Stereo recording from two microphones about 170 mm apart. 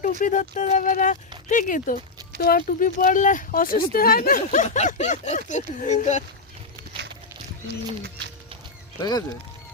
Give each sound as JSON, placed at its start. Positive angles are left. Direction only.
{"t": 0.2, "sound": "speech", "side_deg": 50}
{"t": 2.4, "sound": "speech", "side_deg": 60}
{"t": 9.0, "sound": "speech", "side_deg": 25}